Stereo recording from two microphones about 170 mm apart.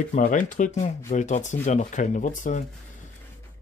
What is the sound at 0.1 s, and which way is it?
Speech, 50° left (ahead or behind).